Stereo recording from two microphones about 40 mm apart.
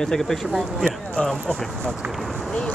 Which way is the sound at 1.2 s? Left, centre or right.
Left.